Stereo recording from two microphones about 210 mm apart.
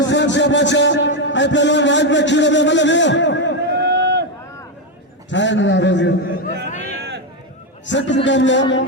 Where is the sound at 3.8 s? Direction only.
50° right (ahead or behind).